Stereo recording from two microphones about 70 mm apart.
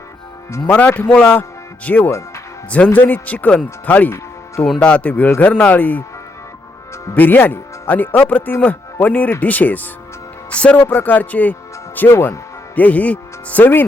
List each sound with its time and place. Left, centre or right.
0.7 s a man's voice: left
2.0 s speech: left
2.6 s speech: centre
7.1 s speech: left
10.8 s speech: left
11.9 s speech: left
12.7 s speech: left